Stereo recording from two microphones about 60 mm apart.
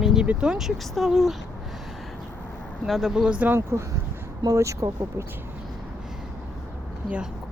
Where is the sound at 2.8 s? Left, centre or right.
Centre.